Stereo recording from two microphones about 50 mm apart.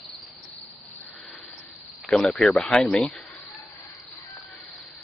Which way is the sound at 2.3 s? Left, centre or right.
Centre.